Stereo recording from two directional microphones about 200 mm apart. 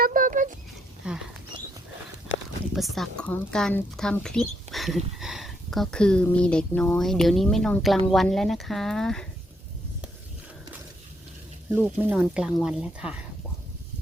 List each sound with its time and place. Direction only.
0.0 s a sound: 40° right (ahead or behind)
1.0 s speech: 5° right (ahead or behind)
2.7 s a woman's voice: centre (ahead or behind)
11.7 s speech: 5° right (ahead or behind)